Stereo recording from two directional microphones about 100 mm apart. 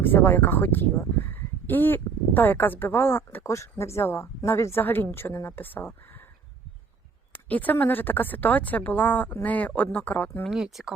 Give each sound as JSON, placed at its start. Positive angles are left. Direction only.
{"t": 0.0, "sound": "speech", "side_deg": 20}
{"t": 7.4, "sound": "speech", "side_deg": 15}
{"t": 10.5, "sound": "speech", "side_deg": -5}